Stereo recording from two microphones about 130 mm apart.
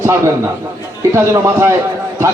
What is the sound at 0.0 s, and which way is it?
A man's voice, 20° right (ahead or behind).